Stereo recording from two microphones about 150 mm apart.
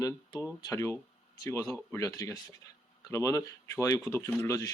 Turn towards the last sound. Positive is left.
turn(degrees=15)  # may be behind; listen again after turning